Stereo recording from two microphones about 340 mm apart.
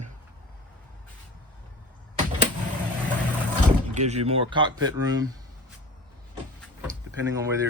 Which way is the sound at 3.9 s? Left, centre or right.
Centre.